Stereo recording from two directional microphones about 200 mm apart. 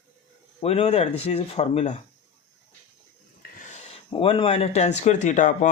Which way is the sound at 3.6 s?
35° left (ahead or behind).